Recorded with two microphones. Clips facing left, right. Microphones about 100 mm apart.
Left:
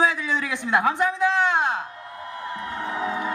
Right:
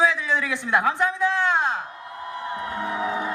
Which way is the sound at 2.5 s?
25° right (ahead or behind).